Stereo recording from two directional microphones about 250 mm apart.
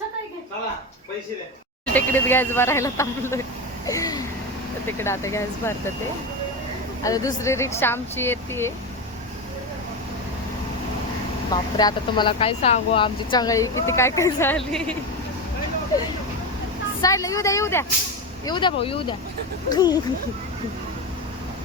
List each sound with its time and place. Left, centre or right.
1.9 s speech: centre
7.0 s speech: centre
11.5 s speech: centre
17.0 s speech: centre